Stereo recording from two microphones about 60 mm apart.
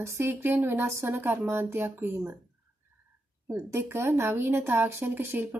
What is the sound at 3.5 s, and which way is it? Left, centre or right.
Speech, right.